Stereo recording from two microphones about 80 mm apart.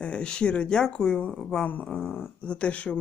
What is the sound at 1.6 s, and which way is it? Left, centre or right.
Speech, left.